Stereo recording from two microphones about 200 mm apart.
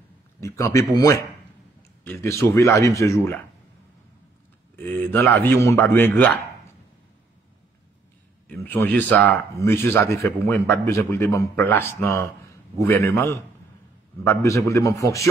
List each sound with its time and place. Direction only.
0.4 s speech: 15° left (ahead or behind)
4.7 s speech: 10° left (ahead or behind)
8.5 s speech: 10° left (ahead or behind)